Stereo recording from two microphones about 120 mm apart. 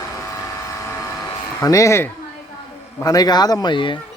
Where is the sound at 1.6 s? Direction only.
25° left (ahead or behind); by 4.0 s 40° left (ahead or behind).